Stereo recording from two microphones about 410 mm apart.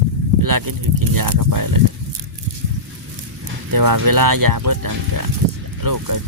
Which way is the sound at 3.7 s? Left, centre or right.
Right.